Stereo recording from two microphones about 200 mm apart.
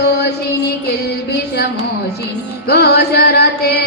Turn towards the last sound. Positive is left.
turn(degrees=55)  # may be behind; listen again after turning